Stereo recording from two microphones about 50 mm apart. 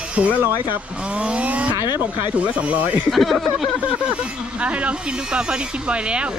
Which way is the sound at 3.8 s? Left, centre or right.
Right.